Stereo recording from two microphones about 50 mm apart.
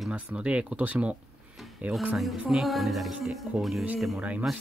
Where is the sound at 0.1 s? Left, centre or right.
Right.